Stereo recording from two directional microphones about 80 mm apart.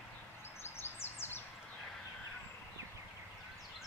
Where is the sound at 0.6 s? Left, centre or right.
Left.